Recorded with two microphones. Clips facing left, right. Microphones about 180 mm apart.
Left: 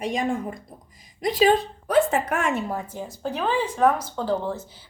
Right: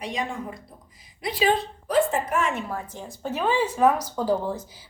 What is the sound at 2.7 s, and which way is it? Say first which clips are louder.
Speech: left 3 dB; 10° left (ahead or behind).